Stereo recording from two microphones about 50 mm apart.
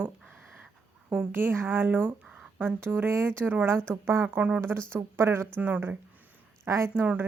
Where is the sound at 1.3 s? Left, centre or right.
Right.